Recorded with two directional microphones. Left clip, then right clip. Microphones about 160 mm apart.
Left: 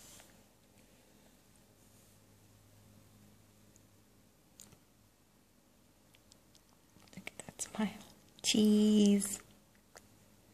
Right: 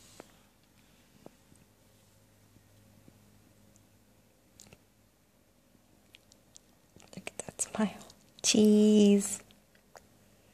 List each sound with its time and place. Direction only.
7.1 s whispering: 30° right (ahead or behind)